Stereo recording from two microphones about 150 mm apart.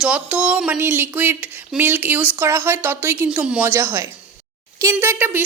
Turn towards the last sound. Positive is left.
turn(degrees=-15)  # may be behind; listen again after turning